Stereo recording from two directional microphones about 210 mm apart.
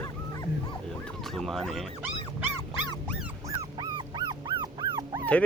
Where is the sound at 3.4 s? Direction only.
15° right (ahead or behind).